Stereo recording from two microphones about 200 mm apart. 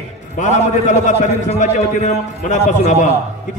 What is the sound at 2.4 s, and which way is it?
Speech, 35° left (ahead or behind).